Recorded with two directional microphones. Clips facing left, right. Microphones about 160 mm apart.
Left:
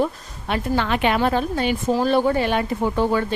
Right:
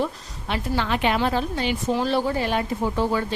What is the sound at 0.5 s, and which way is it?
A woman's voice, 60° left (ahead or behind).